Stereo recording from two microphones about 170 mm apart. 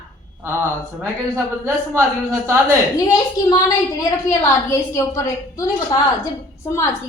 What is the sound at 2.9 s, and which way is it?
A woman's voice, 20° left (ahead or behind).